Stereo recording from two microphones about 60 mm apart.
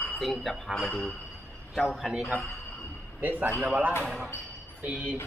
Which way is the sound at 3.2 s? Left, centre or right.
Right.